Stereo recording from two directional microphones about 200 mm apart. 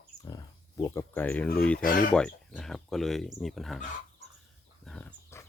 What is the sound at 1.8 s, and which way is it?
Speech, 45° left (ahead or behind).